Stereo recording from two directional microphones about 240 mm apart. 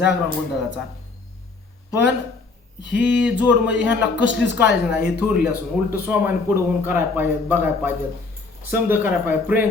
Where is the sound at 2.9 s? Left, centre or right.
Left.